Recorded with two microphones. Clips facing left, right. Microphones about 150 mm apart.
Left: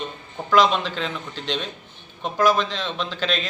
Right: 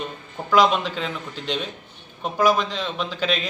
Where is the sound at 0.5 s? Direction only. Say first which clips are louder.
Even; 10° right (ahead or behind).